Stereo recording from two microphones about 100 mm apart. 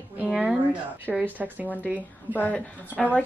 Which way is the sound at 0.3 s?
5° right (ahead or behind).